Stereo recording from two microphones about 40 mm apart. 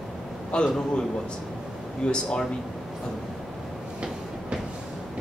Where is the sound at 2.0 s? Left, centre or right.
Left.